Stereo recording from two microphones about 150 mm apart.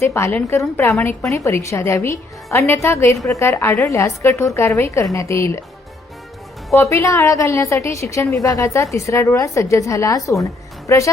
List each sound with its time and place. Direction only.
0.0 s a woman's voice: 15° left (ahead or behind)
6.9 s a woman's voice: 20° left (ahead or behind)